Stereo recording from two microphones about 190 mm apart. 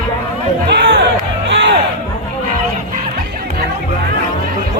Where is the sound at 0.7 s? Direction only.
65° right (ahead or behind).